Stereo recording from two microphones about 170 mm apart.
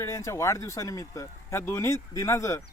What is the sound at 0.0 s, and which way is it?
Speech, 15° left (ahead or behind).